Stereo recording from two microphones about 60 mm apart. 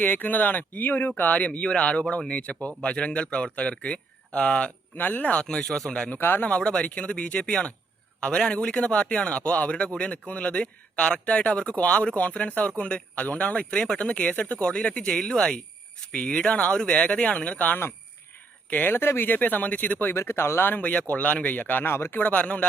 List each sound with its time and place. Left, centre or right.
0.0 s speech: left
4.9 s speech: left
5.4 s speech: centre
6.1 s speech: left
6.4 s speech: centre
13.7 s speech: centre
20.1 s speech: left
22.2 s speech: left